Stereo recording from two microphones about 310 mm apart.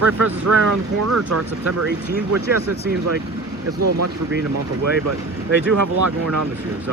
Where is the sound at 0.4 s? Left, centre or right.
Right.